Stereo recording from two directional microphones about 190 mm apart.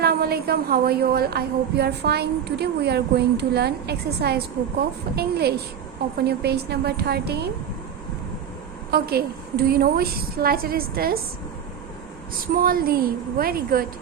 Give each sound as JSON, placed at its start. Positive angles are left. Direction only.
{"t": 0.0, "sound": "a woman's voice", "side_deg": -55}
{"t": 8.9, "sound": "a woman's voice", "side_deg": -55}
{"t": 12.5, "sound": "a woman's voice", "side_deg": -50}